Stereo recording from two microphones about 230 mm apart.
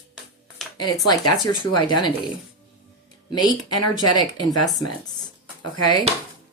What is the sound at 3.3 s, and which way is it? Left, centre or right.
A woman's voice, centre.